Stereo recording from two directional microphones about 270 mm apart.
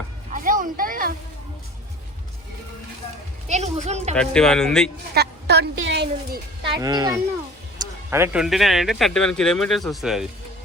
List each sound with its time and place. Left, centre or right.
0.3 s music: right
3.5 s speech: right
4.1 s speech: centre
5.1 s a sound: right
6.7 s speech: centre